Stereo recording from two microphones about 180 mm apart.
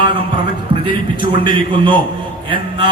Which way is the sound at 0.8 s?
25° right (ahead or behind).